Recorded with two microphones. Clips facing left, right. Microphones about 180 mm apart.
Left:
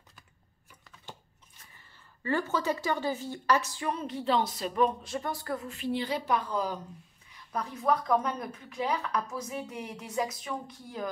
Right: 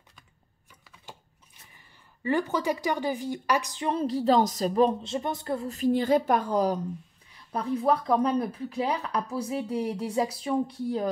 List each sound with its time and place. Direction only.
2.2 s a woman's voice: 15° right (ahead or behind)
3.9 s speech: 35° right (ahead or behind)
5.7 s a woman's voice: 45° right (ahead or behind)
7.5 s speech: 30° right (ahead or behind)